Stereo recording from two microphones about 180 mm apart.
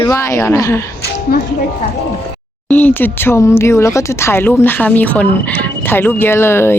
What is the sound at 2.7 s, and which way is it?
Speech, 10° left (ahead or behind).